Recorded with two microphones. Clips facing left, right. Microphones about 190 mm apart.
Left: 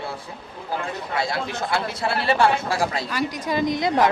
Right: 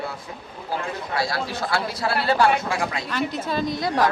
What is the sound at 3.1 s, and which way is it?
Speech, 15° left (ahead or behind).